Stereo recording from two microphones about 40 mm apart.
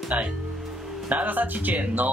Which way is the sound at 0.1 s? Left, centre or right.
Right.